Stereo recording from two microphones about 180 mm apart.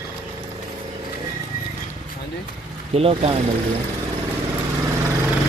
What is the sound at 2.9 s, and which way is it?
Speech, 35° right (ahead or behind).